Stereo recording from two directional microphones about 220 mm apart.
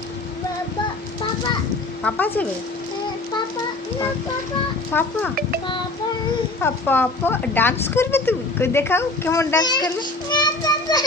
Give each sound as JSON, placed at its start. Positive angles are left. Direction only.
{"t": 2.0, "sound": "speech", "side_deg": 10}
{"t": 4.9, "sound": "speech", "side_deg": 10}
{"t": 6.6, "sound": "speech", "side_deg": 10}
{"t": 10.3, "sound": "child singing", "side_deg": 20}